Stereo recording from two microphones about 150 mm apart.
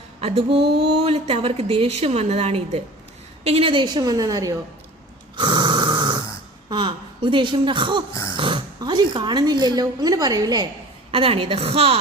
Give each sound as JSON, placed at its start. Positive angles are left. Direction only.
{"t": 0.2, "sound": "a woman's voice", "side_deg": -40}
{"t": 0.6, "sound": "a sound", "side_deg": -90}
{"t": 1.0, "sound": "a woman's voice", "side_deg": -45}
{"t": 5.4, "sound": "snoring", "side_deg": -30}
{"t": 6.7, "sound": "speech", "side_deg": -30}
{"t": 8.1, "sound": "a sound", "side_deg": 20}
{"t": 8.4, "sound": "speech", "side_deg": -35}
{"t": 11.1, "sound": "speech", "side_deg": -35}